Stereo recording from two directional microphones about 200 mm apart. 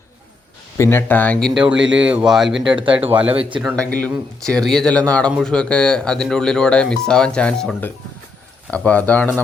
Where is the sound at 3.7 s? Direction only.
5° left (ahead or behind).